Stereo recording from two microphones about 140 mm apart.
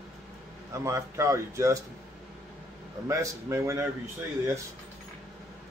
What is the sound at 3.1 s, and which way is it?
Speech, 20° right (ahead or behind).